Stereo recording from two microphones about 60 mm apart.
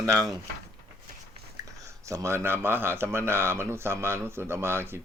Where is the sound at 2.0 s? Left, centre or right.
Right.